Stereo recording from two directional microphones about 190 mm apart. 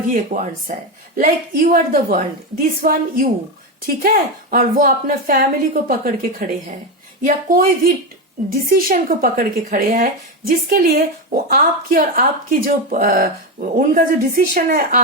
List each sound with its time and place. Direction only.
0.3 s a woman's voice: 45° right (ahead or behind)
7.2 s a woman's voice: 45° right (ahead or behind)